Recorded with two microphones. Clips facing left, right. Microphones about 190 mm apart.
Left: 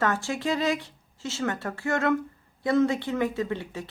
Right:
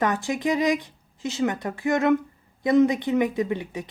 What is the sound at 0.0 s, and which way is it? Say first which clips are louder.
A woman's voice: right 3 dB; 15° right (ahead or behind).